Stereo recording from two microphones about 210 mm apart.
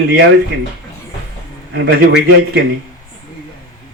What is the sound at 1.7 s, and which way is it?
Speech, 55° right (ahead or behind).